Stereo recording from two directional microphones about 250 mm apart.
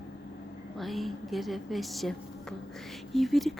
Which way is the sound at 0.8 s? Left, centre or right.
Centre.